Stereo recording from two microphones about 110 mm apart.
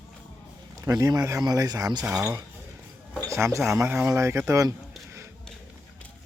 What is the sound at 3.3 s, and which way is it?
Speech, 25° right (ahead or behind).